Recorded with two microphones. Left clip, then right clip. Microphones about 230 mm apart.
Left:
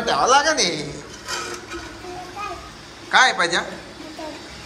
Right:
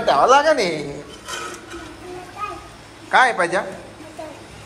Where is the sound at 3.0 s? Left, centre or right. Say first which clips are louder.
Right 1 dB; centre.